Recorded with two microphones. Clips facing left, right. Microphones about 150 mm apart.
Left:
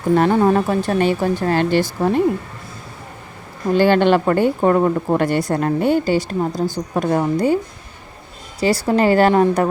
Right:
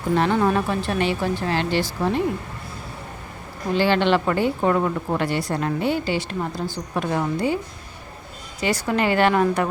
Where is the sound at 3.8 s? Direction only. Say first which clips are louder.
Left 5 dB; 50° left (ahead or behind).